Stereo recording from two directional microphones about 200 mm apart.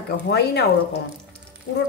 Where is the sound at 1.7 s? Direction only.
65° left (ahead or behind).